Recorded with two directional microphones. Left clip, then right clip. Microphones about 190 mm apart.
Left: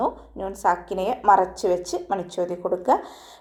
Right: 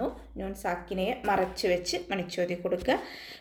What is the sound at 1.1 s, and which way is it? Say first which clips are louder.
Speech: left 11 dB; 35° left (ahead or behind).